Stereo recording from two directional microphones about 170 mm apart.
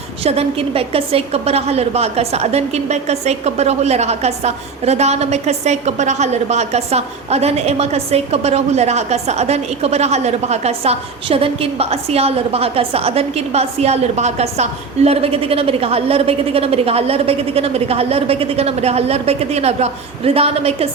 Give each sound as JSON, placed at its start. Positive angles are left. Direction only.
{"t": 0.2, "sound": "a woman's voice", "side_deg": -35}